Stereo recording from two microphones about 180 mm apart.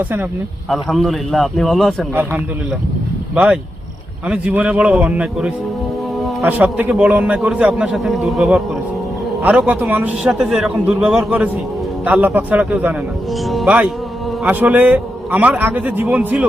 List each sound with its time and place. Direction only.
0.7 s a man's voice: centre (ahead or behind)
3.3 s a man's voice: 5° right (ahead or behind)